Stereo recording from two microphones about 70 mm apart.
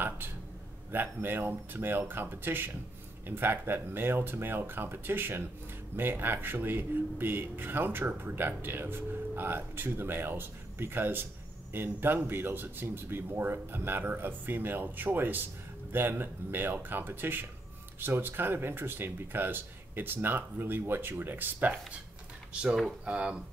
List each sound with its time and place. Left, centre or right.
0.9 s speech: right